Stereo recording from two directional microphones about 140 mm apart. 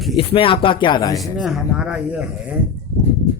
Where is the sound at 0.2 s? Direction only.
40° left (ahead or behind).